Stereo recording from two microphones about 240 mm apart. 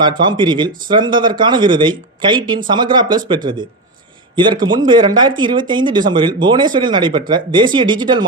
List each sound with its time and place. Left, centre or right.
0.0 s speech: centre